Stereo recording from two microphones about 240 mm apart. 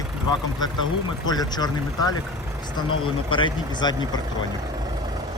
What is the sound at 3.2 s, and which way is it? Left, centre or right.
Speech, centre.